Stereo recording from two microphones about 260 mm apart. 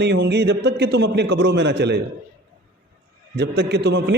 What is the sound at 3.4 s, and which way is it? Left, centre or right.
Speech, right.